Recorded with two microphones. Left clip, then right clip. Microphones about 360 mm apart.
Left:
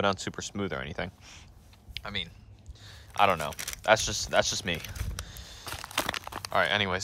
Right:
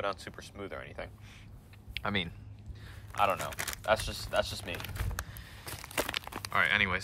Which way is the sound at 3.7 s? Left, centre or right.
Centre.